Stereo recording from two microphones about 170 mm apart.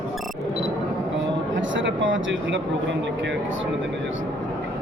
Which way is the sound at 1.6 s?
90° right.